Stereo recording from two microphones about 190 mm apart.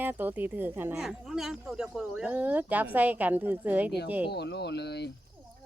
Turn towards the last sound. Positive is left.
turn(degrees=60)  # may be behind; listen again after turning